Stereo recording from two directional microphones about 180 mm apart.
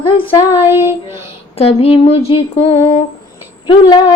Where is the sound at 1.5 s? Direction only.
35° left (ahead or behind).